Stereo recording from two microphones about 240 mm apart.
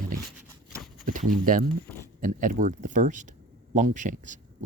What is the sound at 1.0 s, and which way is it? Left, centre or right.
Speech, right.